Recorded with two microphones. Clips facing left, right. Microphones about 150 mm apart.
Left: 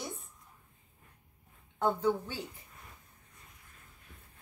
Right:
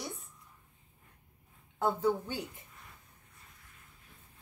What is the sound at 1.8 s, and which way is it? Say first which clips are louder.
Speech: even; 5° right (ahead or behind).